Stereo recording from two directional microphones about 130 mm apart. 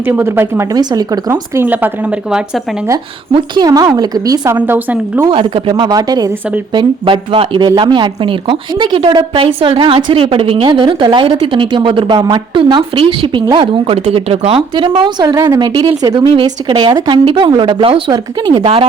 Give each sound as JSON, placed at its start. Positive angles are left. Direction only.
{"t": 0.0, "sound": "a woman's voice", "side_deg": -15}
{"t": 1.3, "sound": "speech", "side_deg": -15}
{"t": 3.3, "sound": "a woman's voice", "side_deg": -35}
{"t": 4.5, "sound": "speech", "side_deg": -15}
{"t": 5.3, "sound": "a woman's voice", "side_deg": -40}
{"t": 6.7, "sound": "a woman's voice", "side_deg": -40}